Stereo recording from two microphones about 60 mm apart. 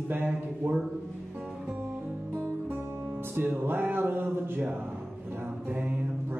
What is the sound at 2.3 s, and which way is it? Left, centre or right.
Music, right.